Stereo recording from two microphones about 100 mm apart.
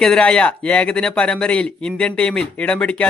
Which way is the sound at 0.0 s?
10° left (ahead or behind).